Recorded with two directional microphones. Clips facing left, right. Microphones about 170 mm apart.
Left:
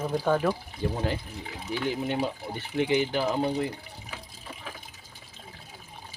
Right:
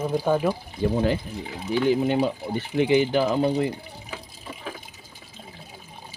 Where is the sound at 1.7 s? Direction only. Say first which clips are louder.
Right 8 dB; 90° right.